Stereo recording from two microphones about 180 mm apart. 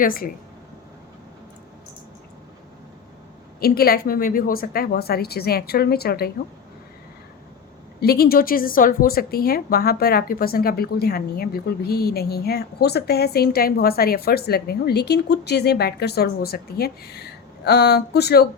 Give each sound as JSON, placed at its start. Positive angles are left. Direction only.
{"t": 0.0, "sound": "speech", "side_deg": 55}
{"t": 3.6, "sound": "a woman's voice", "side_deg": 55}
{"t": 8.0, "sound": "a woman's voice", "side_deg": 55}